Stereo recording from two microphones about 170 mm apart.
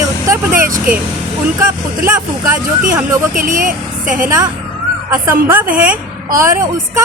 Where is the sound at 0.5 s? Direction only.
55° right (ahead or behind).